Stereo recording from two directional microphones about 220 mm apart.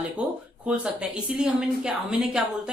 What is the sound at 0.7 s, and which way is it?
Speech, 5° right (ahead or behind).